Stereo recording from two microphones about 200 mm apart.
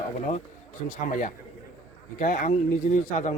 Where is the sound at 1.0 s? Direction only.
40° left (ahead or behind).